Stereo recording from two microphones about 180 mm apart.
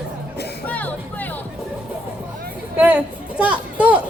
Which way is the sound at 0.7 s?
10° left (ahead or behind).